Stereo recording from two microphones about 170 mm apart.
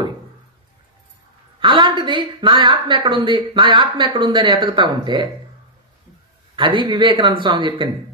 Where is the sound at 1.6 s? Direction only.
30° right (ahead or behind).